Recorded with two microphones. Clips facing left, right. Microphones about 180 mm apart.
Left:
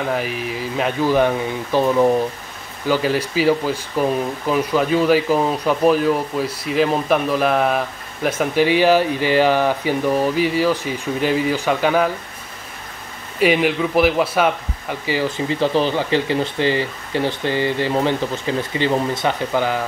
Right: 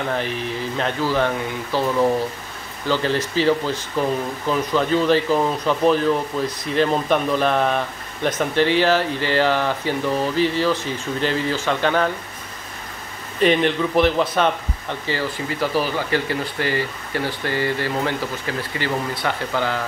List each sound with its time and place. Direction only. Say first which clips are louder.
0.1 s speech: left 1 dB; 5° left (ahead or behind)
13.4 s speech: left 1 dB; 5° left (ahead or behind)
15.3 s speech: left 4 dB; 25° left (ahead or behind)